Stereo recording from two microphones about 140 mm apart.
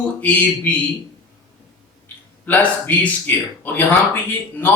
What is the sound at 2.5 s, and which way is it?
Speech, 10° left (ahead or behind).